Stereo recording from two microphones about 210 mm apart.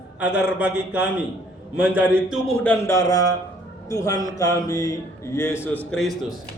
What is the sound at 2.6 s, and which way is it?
A man's voice, 10° left (ahead or behind).